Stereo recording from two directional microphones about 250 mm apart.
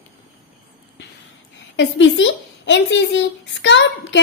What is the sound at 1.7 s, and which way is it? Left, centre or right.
Speech, left.